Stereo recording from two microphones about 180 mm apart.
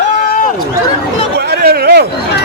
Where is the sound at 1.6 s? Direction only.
60° right (ahead or behind).